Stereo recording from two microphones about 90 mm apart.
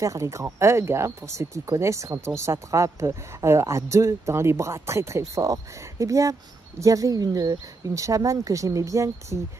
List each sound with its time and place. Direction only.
0.0 s a woman's voice: 35° right (ahead or behind)